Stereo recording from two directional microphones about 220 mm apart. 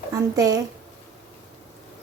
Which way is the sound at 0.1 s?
15° right (ahead or behind).